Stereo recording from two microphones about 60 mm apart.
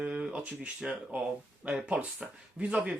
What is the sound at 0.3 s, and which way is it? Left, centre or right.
Speech, centre.